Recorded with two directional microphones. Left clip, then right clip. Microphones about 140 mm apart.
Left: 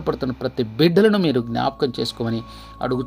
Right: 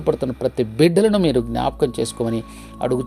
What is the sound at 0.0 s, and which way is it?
Speech, 20° right (ahead or behind).